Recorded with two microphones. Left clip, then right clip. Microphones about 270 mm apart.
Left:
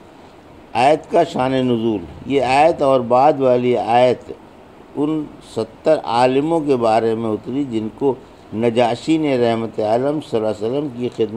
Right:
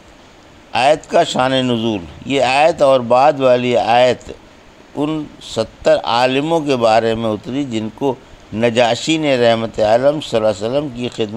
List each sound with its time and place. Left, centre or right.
0.7 s a man's voice: right